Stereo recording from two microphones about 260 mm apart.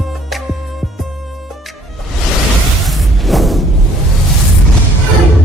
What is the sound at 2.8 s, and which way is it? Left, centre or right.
Music, centre.